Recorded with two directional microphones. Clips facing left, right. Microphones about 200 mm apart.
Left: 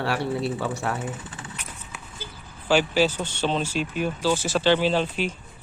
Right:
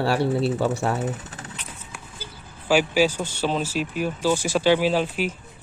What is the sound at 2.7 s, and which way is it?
Speech, 10° right (ahead or behind).